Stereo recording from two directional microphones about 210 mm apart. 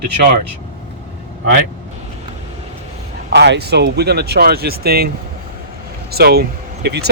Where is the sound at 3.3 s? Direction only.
55° right (ahead or behind).